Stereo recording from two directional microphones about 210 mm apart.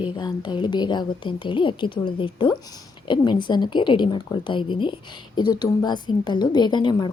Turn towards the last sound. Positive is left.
turn(degrees=20)  # may be behind; listen again after turning